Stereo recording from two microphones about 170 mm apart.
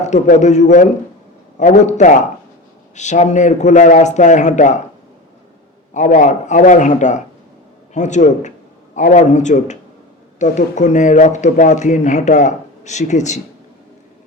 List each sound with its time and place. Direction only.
0.0 s speech: 45° left (ahead or behind)
5.9 s speech: 45° left (ahead or behind)